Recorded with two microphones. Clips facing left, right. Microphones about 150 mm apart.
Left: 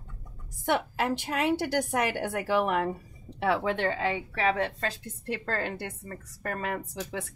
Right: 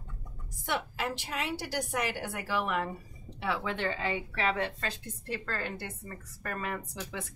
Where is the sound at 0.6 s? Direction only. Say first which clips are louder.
Left 6 dB; 50° left (ahead or behind).